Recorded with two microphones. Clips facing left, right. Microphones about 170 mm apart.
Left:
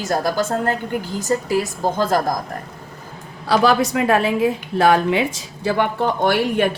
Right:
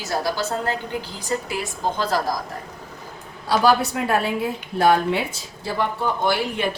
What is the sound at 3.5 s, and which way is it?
A woman's voice, 75° left (ahead or behind).